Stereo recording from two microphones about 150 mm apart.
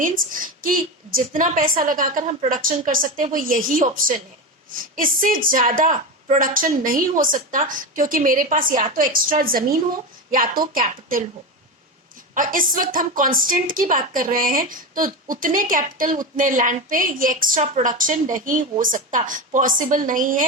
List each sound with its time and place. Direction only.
0.0 s a woman's voice: 65° right (ahead or behind)
12.3 s a woman's voice: 65° right (ahead or behind)